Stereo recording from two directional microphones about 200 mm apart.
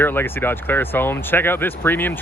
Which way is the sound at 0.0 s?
10° left (ahead or behind).